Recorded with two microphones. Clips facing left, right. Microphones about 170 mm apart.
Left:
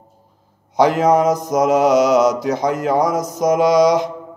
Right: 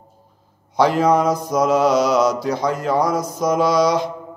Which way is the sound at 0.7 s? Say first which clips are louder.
Left 2 dB; 20° left (ahead or behind).